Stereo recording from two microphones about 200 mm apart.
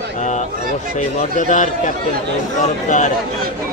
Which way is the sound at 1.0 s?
40° left (ahead or behind).